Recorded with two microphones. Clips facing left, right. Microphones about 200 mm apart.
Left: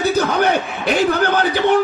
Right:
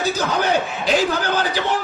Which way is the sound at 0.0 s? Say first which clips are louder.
Left 5 dB; 60° left (ahead or behind).